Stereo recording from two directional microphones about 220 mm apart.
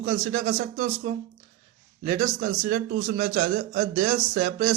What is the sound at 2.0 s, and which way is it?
A man's voice, 30° right (ahead or behind).